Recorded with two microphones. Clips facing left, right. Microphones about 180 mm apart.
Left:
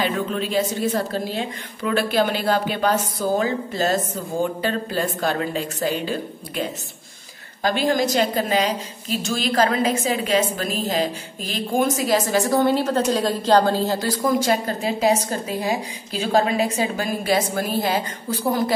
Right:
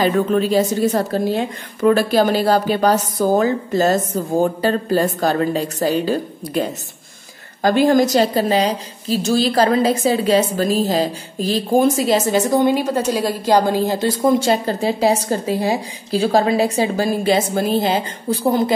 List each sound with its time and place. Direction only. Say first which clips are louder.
0.0 s a woman's voice: right 7 dB; 40° right (ahead or behind)
7.6 s a woman's voice: right 6 dB; 45° right (ahead or behind); by 18.7 s 25° right (ahead or behind)